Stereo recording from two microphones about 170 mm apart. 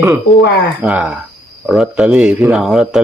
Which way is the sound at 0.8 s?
5° right (ahead or behind).